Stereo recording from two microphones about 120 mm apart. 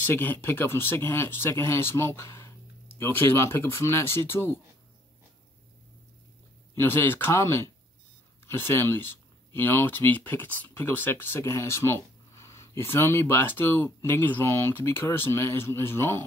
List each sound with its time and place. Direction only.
0.1 s speech: 20° left (ahead or behind)
6.8 s speech: 20° left (ahead or behind)